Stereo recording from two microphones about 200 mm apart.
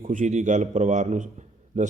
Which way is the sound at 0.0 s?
40° right (ahead or behind).